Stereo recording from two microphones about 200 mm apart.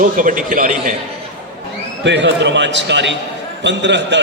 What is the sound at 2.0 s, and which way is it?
Speech, 60° right (ahead or behind).